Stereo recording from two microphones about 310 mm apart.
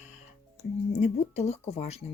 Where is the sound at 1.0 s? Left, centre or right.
Left.